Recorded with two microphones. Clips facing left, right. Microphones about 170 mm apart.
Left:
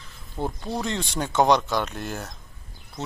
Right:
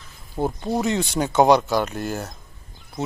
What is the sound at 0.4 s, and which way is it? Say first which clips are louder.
Speech: right 5 dB; 20° right (ahead or behind).